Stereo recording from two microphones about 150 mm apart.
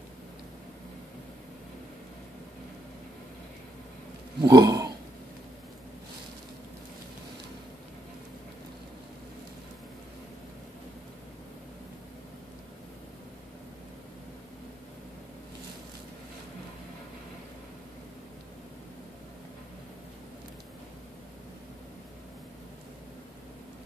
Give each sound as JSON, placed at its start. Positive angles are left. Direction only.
{"t": 4.4, "sound": "speech", "side_deg": -25}